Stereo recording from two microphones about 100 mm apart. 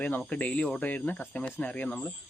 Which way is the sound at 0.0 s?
15° left (ahead or behind).